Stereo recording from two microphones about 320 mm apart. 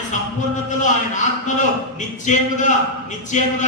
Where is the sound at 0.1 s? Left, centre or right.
Left.